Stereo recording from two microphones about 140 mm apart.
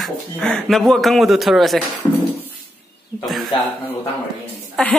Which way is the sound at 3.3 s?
Centre (ahead or behind).